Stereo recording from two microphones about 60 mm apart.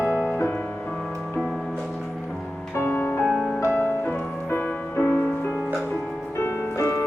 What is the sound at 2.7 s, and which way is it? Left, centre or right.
Music, left.